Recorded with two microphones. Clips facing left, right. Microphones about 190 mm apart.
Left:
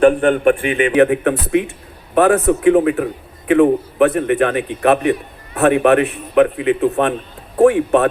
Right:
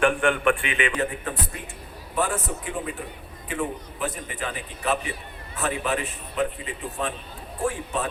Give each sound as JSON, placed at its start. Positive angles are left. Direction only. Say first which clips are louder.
{"t": 0.0, "sound": "a man's voice", "louder": "left 10 dB", "side_deg": 40}
{"t": 1.0, "sound": "speech", "louder": "left 14 dB", "side_deg": 80}
{"t": 2.1, "sound": "a man's voice", "louder": "left 14 dB", "side_deg": 65}